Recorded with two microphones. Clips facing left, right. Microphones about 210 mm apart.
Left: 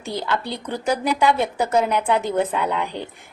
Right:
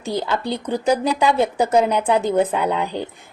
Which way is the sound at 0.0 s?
35° right (ahead or behind).